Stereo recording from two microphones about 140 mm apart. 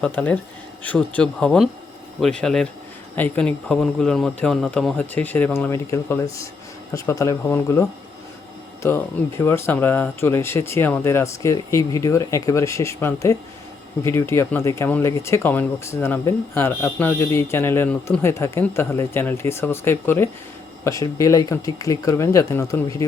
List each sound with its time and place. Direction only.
0.0 s speech: 10° left (ahead or behind)